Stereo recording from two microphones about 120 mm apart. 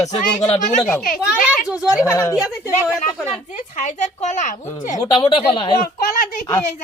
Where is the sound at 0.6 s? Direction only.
90° left.